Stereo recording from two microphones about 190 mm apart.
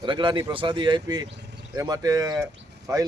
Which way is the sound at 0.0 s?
25° right (ahead or behind).